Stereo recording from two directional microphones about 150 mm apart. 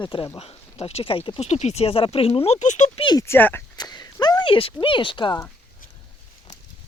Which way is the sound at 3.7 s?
25° left (ahead or behind).